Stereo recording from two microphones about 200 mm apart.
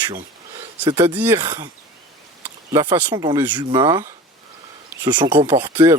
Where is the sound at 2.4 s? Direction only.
10° right (ahead or behind).